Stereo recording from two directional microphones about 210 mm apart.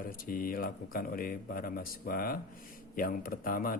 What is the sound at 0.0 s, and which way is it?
A man's voice, 45° left (ahead or behind).